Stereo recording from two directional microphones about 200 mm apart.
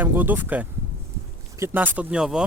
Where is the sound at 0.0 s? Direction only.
10° right (ahead or behind).